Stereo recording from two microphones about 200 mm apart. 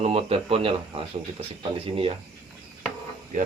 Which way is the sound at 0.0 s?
30° right (ahead or behind).